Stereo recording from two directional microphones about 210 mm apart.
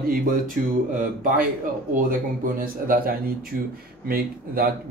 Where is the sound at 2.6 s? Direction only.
45° right (ahead or behind).